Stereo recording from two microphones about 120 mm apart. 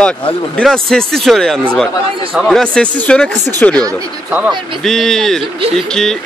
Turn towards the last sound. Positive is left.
turn(degrees=5)  # may be behind; listen again after turning